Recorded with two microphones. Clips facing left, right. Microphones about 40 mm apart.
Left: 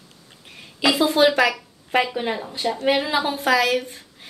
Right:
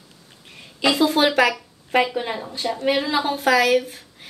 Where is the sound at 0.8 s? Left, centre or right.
Centre.